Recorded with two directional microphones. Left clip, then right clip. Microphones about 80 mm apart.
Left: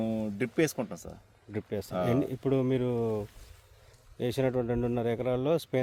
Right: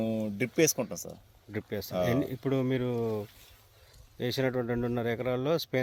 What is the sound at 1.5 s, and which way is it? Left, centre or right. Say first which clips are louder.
Speech: right 1 dB; centre.